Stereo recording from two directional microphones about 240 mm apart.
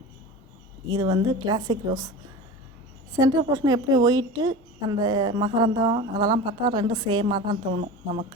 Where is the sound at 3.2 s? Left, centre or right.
Centre.